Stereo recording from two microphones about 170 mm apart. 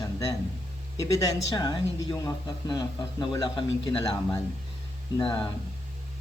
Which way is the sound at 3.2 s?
25° left (ahead or behind).